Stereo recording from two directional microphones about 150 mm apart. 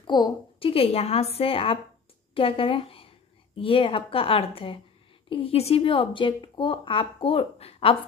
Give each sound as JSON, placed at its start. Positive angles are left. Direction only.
{"t": 0.0, "sound": "a woman's voice", "side_deg": 30}